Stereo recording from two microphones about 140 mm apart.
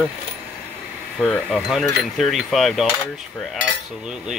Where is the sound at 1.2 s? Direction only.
Centre (ahead or behind).